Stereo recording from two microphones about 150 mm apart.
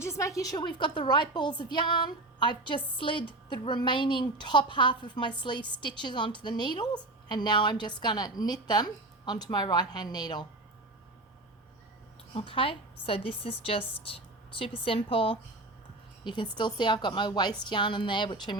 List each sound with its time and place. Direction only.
0.0 s a woman's voice: 20° left (ahead or behind)
12.3 s a woman's voice: 35° left (ahead or behind)